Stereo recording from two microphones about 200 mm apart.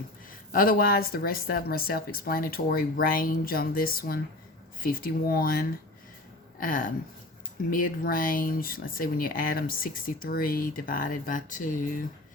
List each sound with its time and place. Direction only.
0.5 s speech: 45° left (ahead or behind)